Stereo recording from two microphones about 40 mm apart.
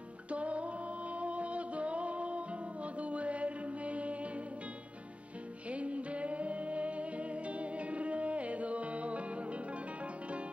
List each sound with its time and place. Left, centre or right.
0.3 s music: right
5.7 s music: right